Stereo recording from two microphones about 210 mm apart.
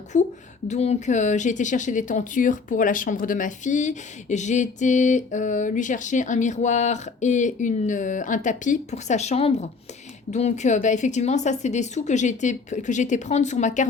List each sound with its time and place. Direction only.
0.1 s speech: 35° left (ahead or behind)